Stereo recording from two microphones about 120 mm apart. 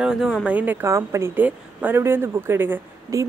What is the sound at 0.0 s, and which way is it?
A woman's voice, 5° right (ahead or behind).